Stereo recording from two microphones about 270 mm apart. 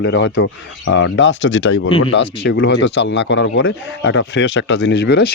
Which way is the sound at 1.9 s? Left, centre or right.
Centre.